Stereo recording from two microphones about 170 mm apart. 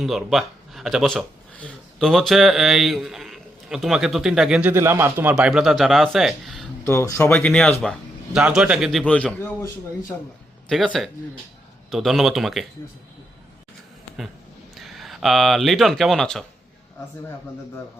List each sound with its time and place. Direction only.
0.0 s speech: centre (ahead or behind)
6.8 s speech: 15° left (ahead or behind)
10.7 s speech: centre (ahead or behind)
14.8 s speech: centre (ahead or behind)